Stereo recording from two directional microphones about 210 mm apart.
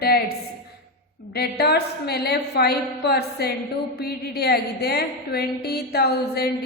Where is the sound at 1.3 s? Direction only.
50° left (ahead or behind).